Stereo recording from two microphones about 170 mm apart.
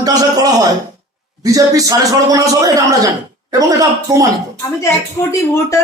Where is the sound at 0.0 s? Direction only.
20° right (ahead or behind).